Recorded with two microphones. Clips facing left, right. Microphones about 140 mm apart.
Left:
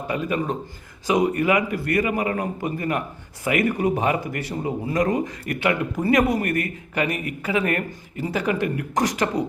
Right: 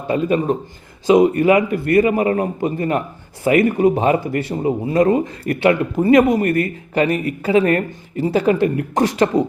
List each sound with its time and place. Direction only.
0.1 s speech: 30° right (ahead or behind)